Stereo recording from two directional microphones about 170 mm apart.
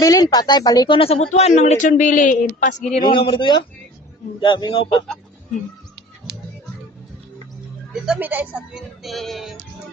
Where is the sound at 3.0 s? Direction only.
30° left (ahead or behind).